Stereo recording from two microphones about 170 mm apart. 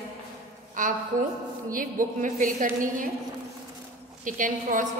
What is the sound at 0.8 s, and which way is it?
A woman's voice, 50° right (ahead or behind).